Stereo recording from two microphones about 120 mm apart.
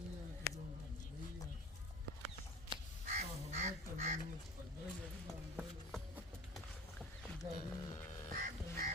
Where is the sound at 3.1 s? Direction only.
70° right (ahead or behind).